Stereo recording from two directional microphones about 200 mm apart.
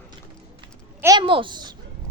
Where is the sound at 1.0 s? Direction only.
25° right (ahead or behind).